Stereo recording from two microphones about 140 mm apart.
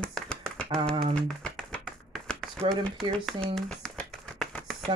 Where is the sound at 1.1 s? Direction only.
10° left (ahead or behind).